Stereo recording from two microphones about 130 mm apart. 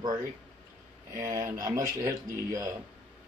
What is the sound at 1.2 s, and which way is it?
Speech, 25° right (ahead or behind).